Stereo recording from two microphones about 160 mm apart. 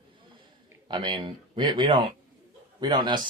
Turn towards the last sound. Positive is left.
turn(degrees=-25)  # may be behind; listen again after turning